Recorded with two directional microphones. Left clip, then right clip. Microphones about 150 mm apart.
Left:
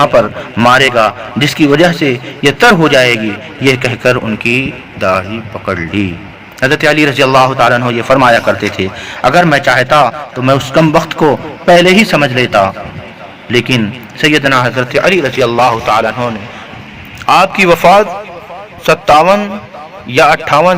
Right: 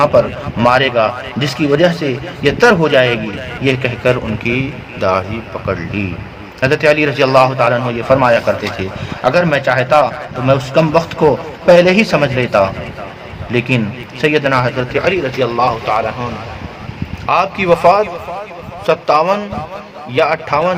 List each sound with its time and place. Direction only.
0.6 s a man's voice: 30° left (ahead or behind)
4.4 s a man's voice: 15° left (ahead or behind)
5.6 s a man's voice: 30° left (ahead or behind)
14.8 s a man's voice: 40° left (ahead or behind)